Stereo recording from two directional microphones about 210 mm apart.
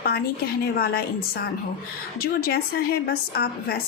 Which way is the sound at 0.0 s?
45° left (ahead or behind).